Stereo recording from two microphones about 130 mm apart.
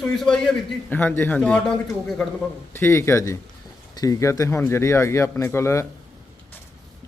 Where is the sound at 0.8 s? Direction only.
15° left (ahead or behind).